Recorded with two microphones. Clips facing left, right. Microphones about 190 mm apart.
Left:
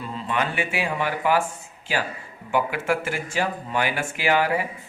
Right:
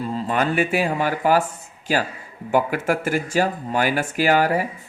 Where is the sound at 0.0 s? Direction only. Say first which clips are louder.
Right 4 dB; 40° right (ahead or behind).